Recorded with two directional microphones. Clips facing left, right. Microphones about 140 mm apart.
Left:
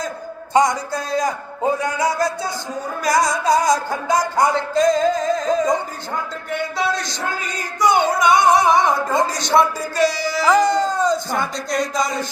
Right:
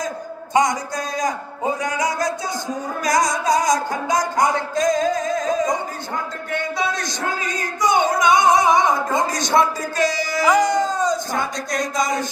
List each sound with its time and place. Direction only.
0.5 s speech: 20° right (ahead or behind)
4.7 s a sound: 20° right (ahead or behind)
5.3 s music: 20° right (ahead or behind)
6.7 s speech: 20° right (ahead or behind)